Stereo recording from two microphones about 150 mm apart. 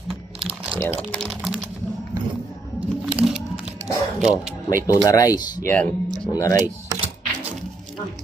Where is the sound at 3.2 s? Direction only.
5° right (ahead or behind).